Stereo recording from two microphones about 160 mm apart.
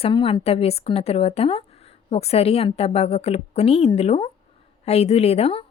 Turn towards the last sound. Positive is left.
turn(degrees=35)  # may be behind; listen again after turning